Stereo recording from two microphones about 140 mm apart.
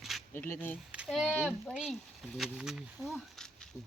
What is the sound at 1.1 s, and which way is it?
Speech, centre (ahead or behind).